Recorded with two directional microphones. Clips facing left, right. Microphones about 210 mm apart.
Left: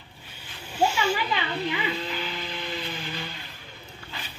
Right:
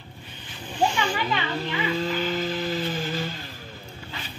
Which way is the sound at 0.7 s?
5° left (ahead or behind).